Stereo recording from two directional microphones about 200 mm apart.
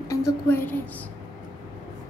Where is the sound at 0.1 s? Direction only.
15° left (ahead or behind).